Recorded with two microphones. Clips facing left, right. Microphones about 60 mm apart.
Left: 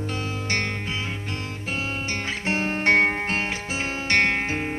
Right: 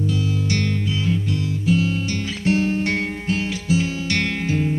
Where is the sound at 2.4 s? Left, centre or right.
Left.